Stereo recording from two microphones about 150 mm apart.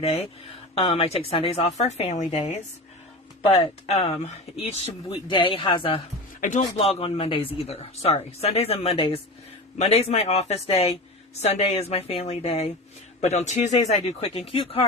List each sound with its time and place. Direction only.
0.0 s a woman's voice: 40° left (ahead or behind)
3.4 s speech: 40° left (ahead or behind)
5.0 s speech: 35° left (ahead or behind)
6.4 s speech: 55° left (ahead or behind)
6.7 s a woman's voice: 40° left (ahead or behind)